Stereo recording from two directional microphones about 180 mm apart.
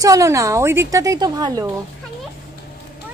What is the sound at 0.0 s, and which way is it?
A woman's voice, 20° right (ahead or behind).